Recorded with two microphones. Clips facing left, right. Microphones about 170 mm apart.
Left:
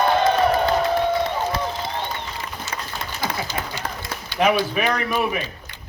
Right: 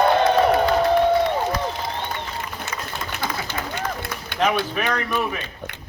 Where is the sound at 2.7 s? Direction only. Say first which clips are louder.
Left 2 dB; 60° right (ahead or behind).